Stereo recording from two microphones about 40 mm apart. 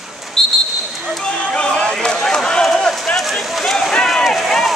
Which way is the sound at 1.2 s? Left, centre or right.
Left.